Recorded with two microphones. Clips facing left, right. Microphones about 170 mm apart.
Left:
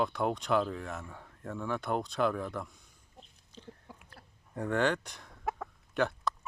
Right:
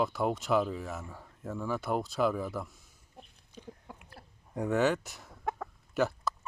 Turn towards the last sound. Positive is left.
turn(degrees=-5)  # may be behind; listen again after turning